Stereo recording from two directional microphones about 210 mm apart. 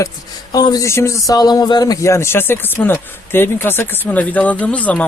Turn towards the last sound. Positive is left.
turn(degrees=5)  # may be behind; listen again after turning